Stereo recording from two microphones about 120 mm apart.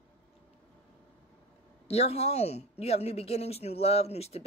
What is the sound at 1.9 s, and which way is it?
A woman's voice, 60° left (ahead or behind).